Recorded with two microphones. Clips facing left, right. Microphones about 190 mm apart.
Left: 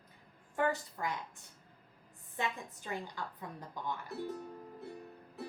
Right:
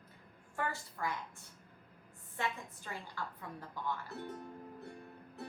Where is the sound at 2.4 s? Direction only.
20° left (ahead or behind).